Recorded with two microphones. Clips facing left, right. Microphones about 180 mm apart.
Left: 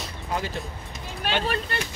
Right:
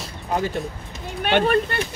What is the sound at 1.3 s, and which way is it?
Speech, 60° right (ahead or behind).